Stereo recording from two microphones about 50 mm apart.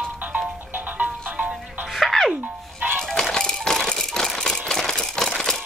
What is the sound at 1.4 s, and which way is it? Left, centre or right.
Music, centre.